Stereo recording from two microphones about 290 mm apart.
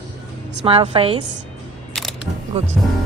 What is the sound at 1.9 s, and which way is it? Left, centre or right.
Camera, centre.